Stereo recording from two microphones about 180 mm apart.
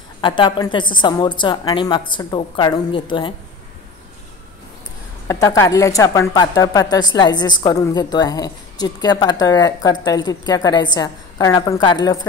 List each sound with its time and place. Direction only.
0.2 s a woman's voice: 25° left (ahead or behind)
5.3 s a woman's voice: 20° left (ahead or behind)